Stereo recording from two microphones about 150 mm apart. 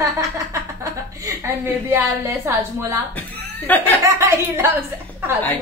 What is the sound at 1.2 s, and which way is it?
A woman's voice, 15° right (ahead or behind).